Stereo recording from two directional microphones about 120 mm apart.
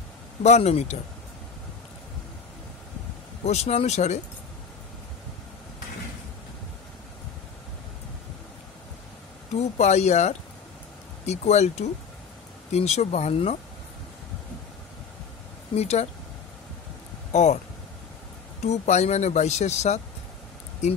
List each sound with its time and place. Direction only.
0.4 s speech: 65° left (ahead or behind)
3.4 s speech: 60° left (ahead or behind)
9.6 s speech: 70° left (ahead or behind)
15.7 s speech: 65° left (ahead or behind)
17.3 s speech: 75° left (ahead or behind)
18.6 s speech: 70° left (ahead or behind)